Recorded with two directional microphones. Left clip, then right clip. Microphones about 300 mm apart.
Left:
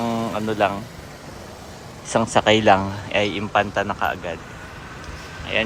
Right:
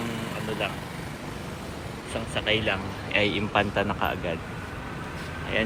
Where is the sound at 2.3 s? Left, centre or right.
Left.